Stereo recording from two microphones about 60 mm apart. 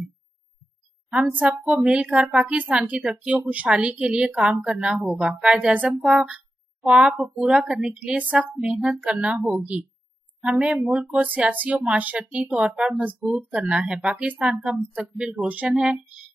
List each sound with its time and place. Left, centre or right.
1.4 s speech: right
6.0 s a sound: centre
6.9 s speech: centre
8.5 s speech: centre
9.7 s speech: right
10.4 s speech: centre
15.7 s speech: centre